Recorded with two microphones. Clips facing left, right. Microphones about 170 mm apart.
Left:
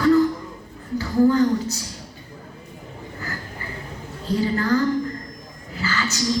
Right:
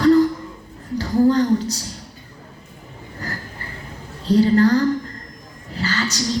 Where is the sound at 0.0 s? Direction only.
35° right (ahead or behind).